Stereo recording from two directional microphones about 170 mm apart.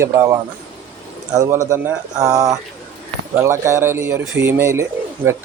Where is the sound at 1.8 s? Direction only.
5° right (ahead or behind).